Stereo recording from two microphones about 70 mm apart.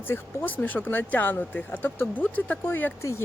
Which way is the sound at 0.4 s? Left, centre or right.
Left.